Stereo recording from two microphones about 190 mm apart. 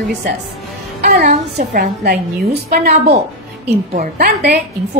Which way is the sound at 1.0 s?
50° right (ahead or behind).